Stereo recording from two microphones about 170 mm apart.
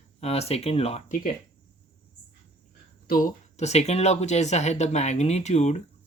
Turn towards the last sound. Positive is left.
turn(degrees=40)  # may be behind; listen again after turning